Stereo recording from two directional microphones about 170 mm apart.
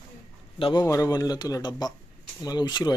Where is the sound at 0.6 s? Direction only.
30° left (ahead or behind).